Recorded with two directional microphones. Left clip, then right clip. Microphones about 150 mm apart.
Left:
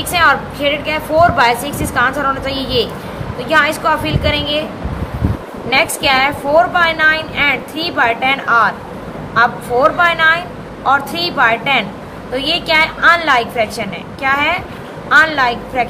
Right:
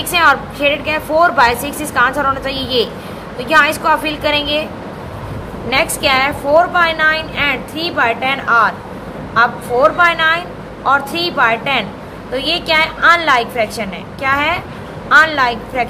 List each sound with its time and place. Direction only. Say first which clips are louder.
0.1 s a woman's voice: even; 30° right (ahead or behind)
5.7 s a woman's voice: left 1 dB; 25° right (ahead or behind)